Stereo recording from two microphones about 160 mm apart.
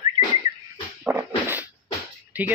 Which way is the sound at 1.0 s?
15° right (ahead or behind).